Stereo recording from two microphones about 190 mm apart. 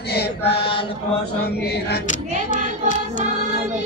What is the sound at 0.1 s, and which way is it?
Mantra, 60° left (ahead or behind).